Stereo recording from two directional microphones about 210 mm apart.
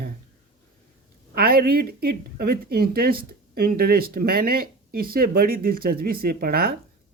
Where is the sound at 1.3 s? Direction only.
45° right (ahead or behind).